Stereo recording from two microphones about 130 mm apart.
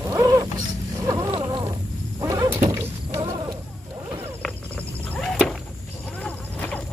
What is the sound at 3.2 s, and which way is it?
Roaring cats, 35° right (ahead or behind).